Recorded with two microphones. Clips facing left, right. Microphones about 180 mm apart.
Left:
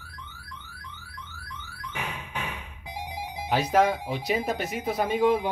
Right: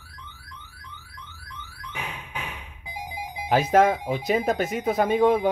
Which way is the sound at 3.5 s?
50° right (ahead or behind).